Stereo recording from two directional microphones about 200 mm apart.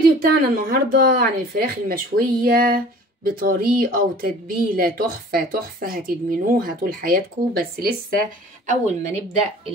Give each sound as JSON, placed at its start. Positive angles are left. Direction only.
{"t": 0.2, "sound": "speech", "side_deg": -45}
{"t": 8.6, "sound": "speech", "side_deg": -35}